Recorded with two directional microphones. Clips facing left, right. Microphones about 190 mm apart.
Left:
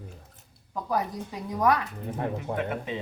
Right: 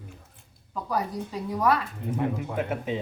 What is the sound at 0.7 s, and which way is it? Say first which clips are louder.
A woman's voice: even; 20° left (ahead or behind).